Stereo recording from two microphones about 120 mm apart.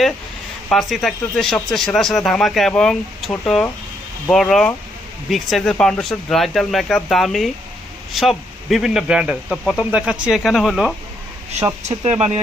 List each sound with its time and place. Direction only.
0.7 s speech: centre (ahead or behind)
11.9 s speech: 65° right (ahead or behind)